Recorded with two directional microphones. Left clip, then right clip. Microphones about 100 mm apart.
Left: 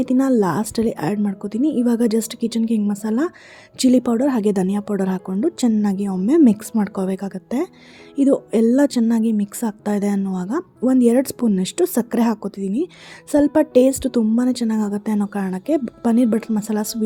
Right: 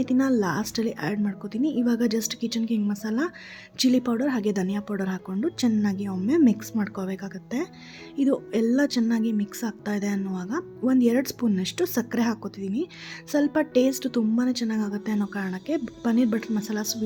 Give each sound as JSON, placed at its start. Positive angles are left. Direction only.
{"t": 0.0, "sound": "a woman's voice", "side_deg": 45}